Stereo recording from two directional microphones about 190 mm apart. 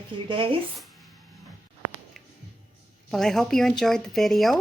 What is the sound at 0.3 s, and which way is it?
Speech, 25° right (ahead or behind).